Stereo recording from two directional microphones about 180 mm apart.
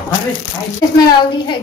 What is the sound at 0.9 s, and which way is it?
Speech, 20° left (ahead or behind).